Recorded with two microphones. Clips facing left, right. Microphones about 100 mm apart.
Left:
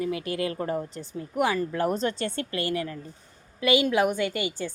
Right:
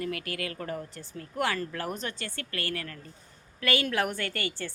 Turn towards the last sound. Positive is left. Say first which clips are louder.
# left 6 dB
turn(degrees=15)  # may be behind; listen again after turning